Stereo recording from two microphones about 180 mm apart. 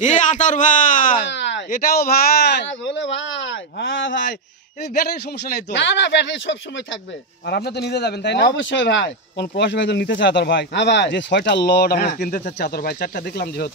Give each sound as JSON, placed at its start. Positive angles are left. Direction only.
{"t": 0.0, "sound": "a man's voice", "side_deg": 45}
{"t": 1.3, "sound": "speech", "side_deg": 75}
{"t": 5.7, "sound": "speech", "side_deg": 80}
{"t": 7.4, "sound": "speech", "side_deg": 60}